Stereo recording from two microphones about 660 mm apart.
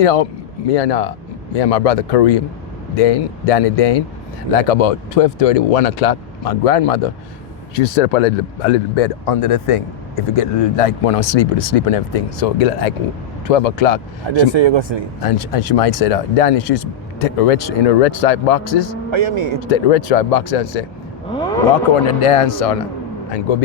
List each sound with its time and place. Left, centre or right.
0.0 s speech: left
7.8 s speech: left
14.3 s speech: right
15.2 s speech: left
19.1 s speech: right
19.6 s speech: left
21.2 s a sound: centre
22.2 s speech: left